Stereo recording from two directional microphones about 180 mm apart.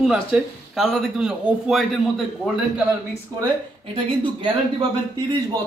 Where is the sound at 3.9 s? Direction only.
30° right (ahead or behind).